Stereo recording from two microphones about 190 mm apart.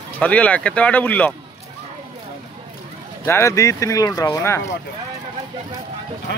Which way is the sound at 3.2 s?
15° left (ahead or behind).